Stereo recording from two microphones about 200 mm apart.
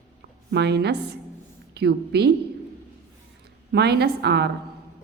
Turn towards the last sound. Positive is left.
turn(degrees=-55)  # may be behind; listen again after turning